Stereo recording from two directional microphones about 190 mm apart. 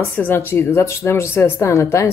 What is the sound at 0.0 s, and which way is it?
Speech, 10° left (ahead or behind).